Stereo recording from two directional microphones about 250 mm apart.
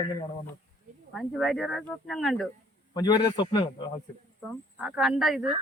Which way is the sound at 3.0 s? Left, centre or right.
Centre.